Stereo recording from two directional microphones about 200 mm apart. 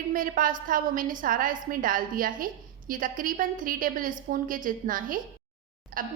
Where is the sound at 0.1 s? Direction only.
45° right (ahead or behind).